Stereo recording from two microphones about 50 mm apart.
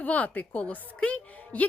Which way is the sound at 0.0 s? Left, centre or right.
Left.